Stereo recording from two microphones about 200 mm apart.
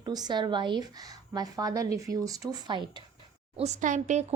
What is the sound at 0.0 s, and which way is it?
Speech, 20° right (ahead or behind).